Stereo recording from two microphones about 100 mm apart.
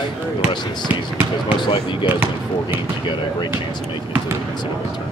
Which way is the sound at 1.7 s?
55° left (ahead or behind).